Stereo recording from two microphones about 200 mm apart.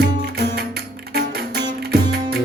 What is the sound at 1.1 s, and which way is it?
Music, 50° right (ahead or behind).